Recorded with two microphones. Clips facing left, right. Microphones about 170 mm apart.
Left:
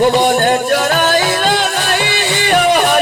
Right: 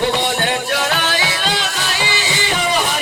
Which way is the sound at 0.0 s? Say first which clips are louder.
Left 7 dB; 50° left (ahead or behind).